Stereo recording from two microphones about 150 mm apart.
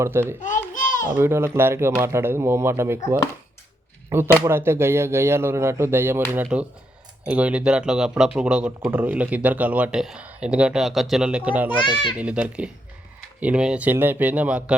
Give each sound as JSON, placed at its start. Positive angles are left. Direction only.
{"t": 0.0, "sound": "speech", "side_deg": -15}
{"t": 0.3, "sound": "a sound", "side_deg": 60}
{"t": 1.1, "sound": "speech", "side_deg": -15}